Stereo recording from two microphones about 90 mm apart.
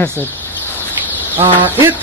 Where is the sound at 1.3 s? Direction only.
25° right (ahead or behind).